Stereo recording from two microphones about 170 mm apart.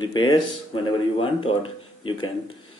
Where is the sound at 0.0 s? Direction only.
30° left (ahead or behind).